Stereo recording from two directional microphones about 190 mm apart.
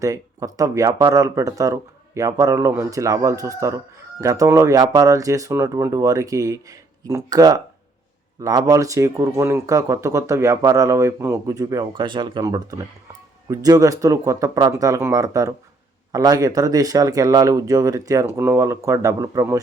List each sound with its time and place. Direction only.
0.0 s speech: 15° right (ahead or behind)